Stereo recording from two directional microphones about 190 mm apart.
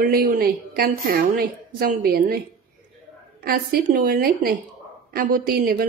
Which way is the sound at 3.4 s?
55° right (ahead or behind).